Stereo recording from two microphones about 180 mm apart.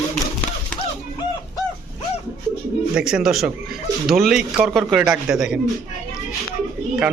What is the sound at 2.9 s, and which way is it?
A man's voice, 5° right (ahead or behind).